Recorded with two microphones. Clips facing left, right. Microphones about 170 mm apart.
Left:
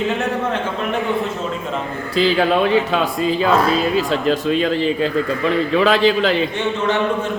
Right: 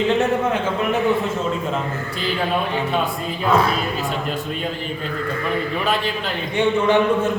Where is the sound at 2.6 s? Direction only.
90° left.